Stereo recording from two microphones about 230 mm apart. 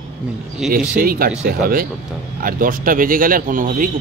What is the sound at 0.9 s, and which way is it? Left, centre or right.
Speech, right.